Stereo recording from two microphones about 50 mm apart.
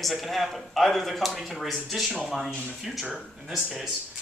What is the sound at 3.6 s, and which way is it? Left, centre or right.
Speech, centre.